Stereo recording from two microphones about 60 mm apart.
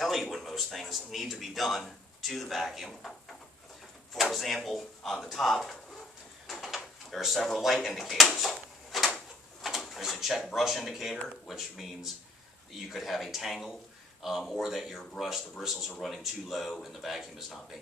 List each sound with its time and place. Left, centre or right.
0.0 s speech: centre
4.1 s speech: centre
6.4 s drawer open or close: centre
10.5 s speech: centre